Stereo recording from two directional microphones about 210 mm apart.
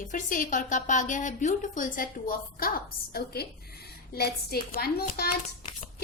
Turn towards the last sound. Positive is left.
turn(degrees=45)  # may be behind; listen again after turning